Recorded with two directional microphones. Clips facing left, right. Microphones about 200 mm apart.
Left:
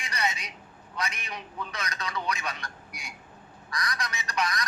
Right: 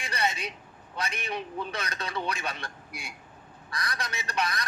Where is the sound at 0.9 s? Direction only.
30° right (ahead or behind).